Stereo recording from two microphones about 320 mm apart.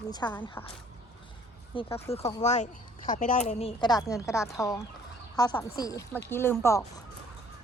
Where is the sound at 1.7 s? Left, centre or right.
Centre.